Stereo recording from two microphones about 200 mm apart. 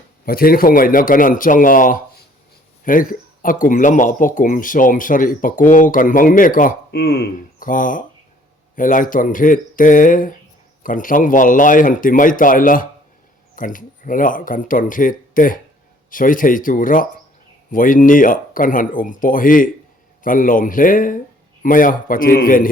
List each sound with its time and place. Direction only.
0.3 s speech: 45° left (ahead or behind)